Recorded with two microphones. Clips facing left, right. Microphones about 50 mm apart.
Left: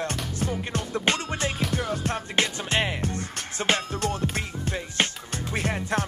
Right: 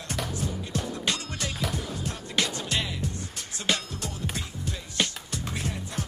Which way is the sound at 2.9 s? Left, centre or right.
Left.